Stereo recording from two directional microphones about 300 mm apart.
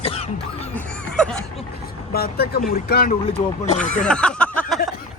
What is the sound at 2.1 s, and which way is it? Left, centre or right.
Speech, left.